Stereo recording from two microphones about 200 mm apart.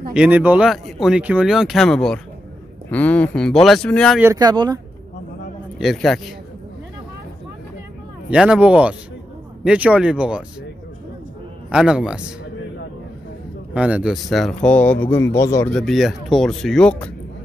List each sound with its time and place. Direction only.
0.1 s speech: 5° right (ahead or behind)
4.2 s speech: 15° right (ahead or behind)
5.8 s speech: centre (ahead or behind)
8.3 s speech: 5° right (ahead or behind)
11.7 s speech: 5° right (ahead or behind)
13.7 s speech: 5° right (ahead or behind); by 15.7 s 15° left (ahead or behind)
15.7 s speech: centre (ahead or behind)